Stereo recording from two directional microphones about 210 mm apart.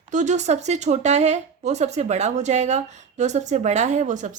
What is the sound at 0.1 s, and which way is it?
Speech, 35° right (ahead or behind).